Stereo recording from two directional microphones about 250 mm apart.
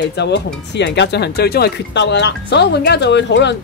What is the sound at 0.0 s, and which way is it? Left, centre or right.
Speech, left.